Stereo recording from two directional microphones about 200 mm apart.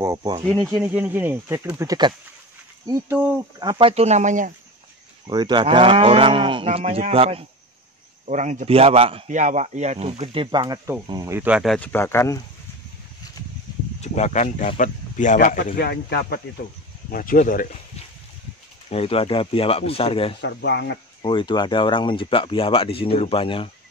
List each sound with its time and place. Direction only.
0.0 s speech: 20° right (ahead or behind)
0.7 s a man's voice: 5° right (ahead or behind); by 4.5 s 40° right (ahead or behind)
5.2 s a man's voice: 20° right (ahead or behind); by 12.4 s 15° left (ahead or behind)
14.0 s speech: 35° left (ahead or behind)
18.9 s speech: 30° left (ahead or behind)
20.3 s speech: 60° left (ahead or behind)
21.2 s speech: 25° left (ahead or behind)